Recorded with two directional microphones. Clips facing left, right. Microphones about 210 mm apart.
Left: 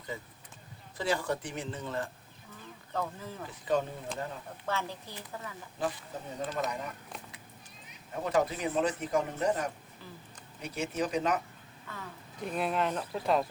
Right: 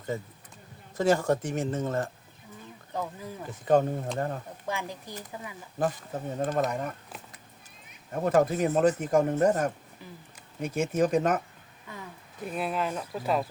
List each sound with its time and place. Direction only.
0.1 s speech: 45° right (ahead or behind)
2.9 s a woman's voice: 15° right (ahead or behind)
3.5 s speech: 50° right (ahead or behind)
4.6 s a woman's voice: 15° right (ahead or behind)
5.8 s speech: 45° right (ahead or behind)
8.1 s speech: 50° right (ahead or behind)
11.9 s a woman's voice: 15° right (ahead or behind)
12.4 s speech: 5° right (ahead or behind)